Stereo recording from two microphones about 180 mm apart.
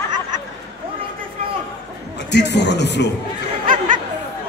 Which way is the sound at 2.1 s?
75° left (ahead or behind).